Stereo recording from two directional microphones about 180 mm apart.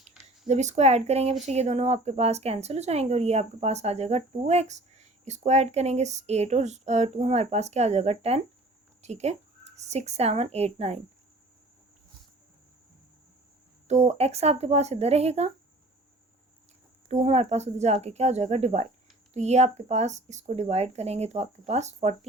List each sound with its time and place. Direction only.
0.4 s a woman's voice: 40° right (ahead or behind)
13.8 s speech: 40° right (ahead or behind)
17.1 s speech: 35° right (ahead or behind)